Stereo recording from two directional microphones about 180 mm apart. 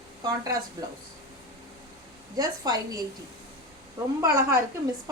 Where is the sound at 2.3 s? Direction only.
20° right (ahead or behind).